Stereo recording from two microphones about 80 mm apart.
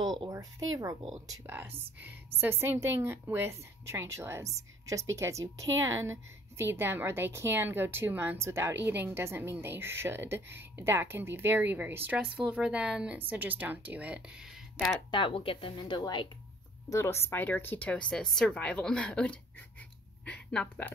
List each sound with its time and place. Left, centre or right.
0.3 s speech: right
1.5 s a woman's voice: right
12.2 s a woman's voice: centre
15.0 s speech: left
16.9 s speech: left; by 20.9 s centre